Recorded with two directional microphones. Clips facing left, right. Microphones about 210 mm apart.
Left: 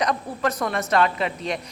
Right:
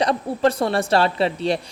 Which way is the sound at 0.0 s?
30° right (ahead or behind).